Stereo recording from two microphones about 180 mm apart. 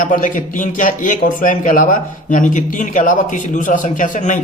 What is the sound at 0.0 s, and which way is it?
A man's voice, 45° left (ahead or behind).